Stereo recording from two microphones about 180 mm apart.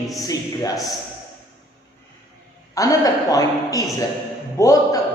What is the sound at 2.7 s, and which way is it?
A man's voice, 20° left (ahead or behind).